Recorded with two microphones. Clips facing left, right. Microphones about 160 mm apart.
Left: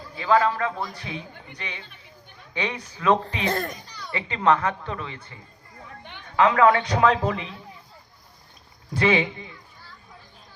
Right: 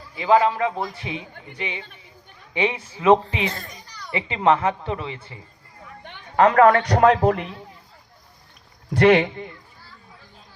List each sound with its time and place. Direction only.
0.2 s a woman's voice: 20° right (ahead or behind)
3.4 s a child's voice: 55° left (ahead or behind)
4.1 s a woman's voice: 25° right (ahead or behind)
6.1 s speech: 50° right (ahead or behind)
8.9 s speech: 65° right (ahead or behind)